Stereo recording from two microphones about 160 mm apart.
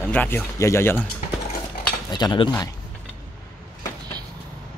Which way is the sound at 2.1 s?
30° left (ahead or behind).